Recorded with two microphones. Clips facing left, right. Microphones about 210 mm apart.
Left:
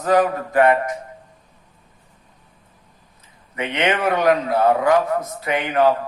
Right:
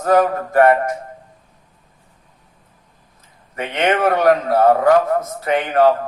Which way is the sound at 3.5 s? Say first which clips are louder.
Right 3 dB; 50° right (ahead or behind).